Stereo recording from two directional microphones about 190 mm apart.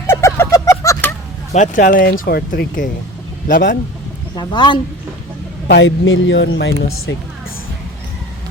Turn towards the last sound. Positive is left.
turn(degrees=70)  # may be behind; listen again after turning